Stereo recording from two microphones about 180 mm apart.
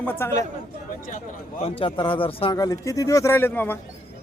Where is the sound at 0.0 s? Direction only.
10° left (ahead or behind).